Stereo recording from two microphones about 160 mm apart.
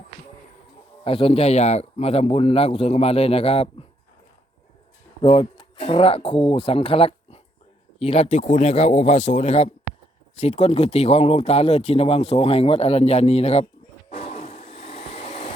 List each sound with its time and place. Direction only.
1.0 s speech: 35° left (ahead or behind)
5.2 s speech: 35° left (ahead or behind)
14.1 s vacuum cleaner: 50° left (ahead or behind)